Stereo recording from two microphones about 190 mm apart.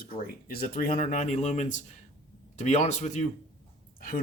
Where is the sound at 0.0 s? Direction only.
50° left (ahead or behind).